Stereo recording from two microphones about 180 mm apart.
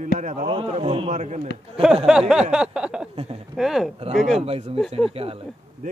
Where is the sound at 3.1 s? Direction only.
30° right (ahead or behind).